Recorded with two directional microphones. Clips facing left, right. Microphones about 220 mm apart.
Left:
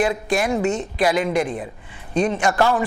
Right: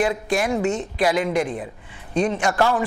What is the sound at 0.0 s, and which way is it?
A man's voice, 15° left (ahead or behind).